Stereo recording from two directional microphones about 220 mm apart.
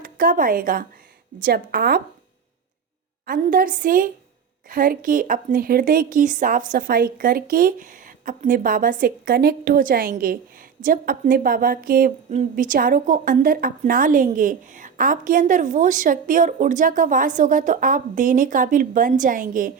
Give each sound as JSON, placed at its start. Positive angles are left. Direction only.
{"t": 0.0, "sound": "a woman's voice", "side_deg": -40}
{"t": 3.2, "sound": "a woman's voice", "side_deg": -40}